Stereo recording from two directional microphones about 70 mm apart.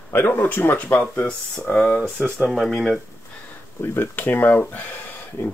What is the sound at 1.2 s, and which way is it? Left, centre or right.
Speech, centre.